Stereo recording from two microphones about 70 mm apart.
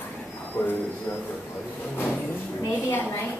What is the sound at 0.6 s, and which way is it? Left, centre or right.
Speech, left.